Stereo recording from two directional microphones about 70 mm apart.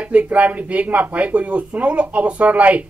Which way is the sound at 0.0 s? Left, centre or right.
Centre.